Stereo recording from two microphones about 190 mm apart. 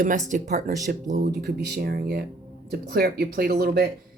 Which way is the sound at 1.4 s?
55° right (ahead or behind).